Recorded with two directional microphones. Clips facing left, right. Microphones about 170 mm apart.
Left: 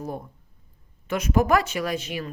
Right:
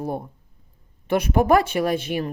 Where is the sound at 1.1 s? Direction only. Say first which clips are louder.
Right 3 dB; 30° right (ahead or behind).